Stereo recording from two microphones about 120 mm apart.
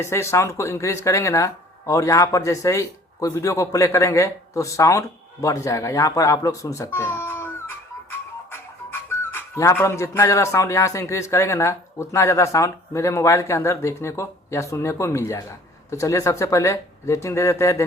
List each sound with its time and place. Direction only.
0.0 s speech: 25° left (ahead or behind)